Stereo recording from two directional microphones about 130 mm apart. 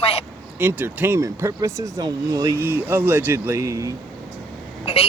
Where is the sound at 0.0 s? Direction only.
50° left (ahead or behind).